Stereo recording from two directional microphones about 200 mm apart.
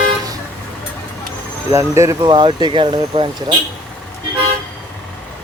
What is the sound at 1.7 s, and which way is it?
Speech, 15° right (ahead or behind).